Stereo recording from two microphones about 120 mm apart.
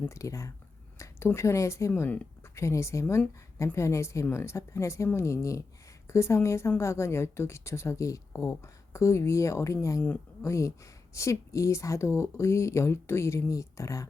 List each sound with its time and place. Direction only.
0.1 s a woman's voice: 25° left (ahead or behind)
1.9 s a woman's voice: 15° left (ahead or behind)